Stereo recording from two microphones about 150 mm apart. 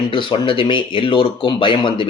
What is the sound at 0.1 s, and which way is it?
Speech, 30° left (ahead or behind).